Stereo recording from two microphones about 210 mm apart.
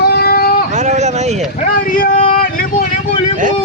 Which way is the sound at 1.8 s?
40° left (ahead or behind).